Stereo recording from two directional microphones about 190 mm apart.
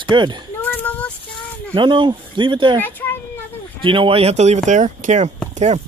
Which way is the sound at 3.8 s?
25° right (ahead or behind).